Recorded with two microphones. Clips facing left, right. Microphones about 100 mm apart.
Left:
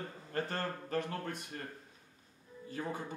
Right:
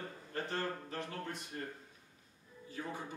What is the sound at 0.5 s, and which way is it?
Speech, 55° left (ahead or behind).